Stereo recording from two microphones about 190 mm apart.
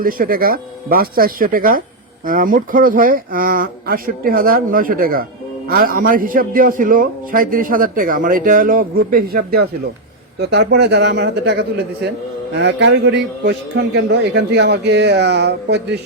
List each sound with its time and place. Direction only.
0.0 s a man's voice: 50° right (ahead or behind)
10.5 s a man's voice: 60° right (ahead or behind)